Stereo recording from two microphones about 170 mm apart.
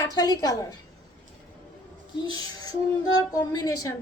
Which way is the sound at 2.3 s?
20° left (ahead or behind).